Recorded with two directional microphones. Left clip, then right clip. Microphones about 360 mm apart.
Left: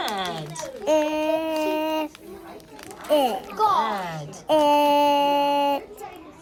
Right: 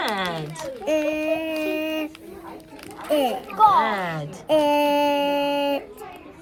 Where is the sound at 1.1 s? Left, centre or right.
Centre.